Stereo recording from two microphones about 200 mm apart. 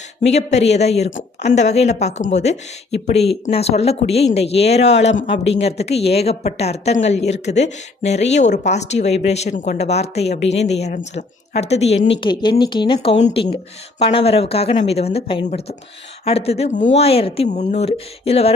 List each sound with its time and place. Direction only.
0.2 s speech: 35° left (ahead or behind)